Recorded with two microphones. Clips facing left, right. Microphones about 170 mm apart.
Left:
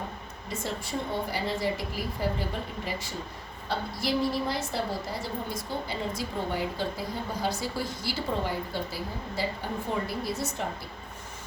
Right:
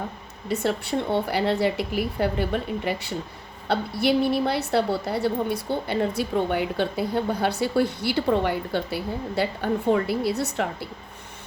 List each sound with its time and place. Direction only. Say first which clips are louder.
0.4 s a woman's voice: right 9 dB; 65° right (ahead or behind)